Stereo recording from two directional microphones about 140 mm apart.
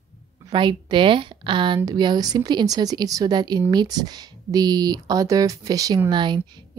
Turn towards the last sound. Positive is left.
turn(degrees=-35)  # may be behind; listen again after turning